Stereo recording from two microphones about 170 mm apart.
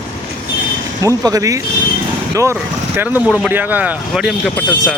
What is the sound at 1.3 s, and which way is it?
Speech, 20° right (ahead or behind).